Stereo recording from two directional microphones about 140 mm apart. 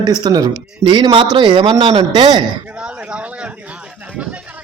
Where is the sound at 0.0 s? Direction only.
30° right (ahead or behind).